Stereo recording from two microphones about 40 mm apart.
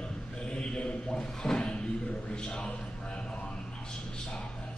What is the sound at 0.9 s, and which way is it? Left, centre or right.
Speech, left.